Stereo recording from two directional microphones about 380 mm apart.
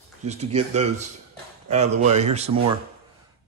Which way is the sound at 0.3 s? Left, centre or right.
Centre.